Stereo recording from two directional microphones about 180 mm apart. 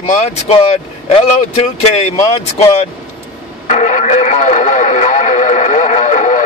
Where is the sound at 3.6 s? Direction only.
40° left (ahead or behind).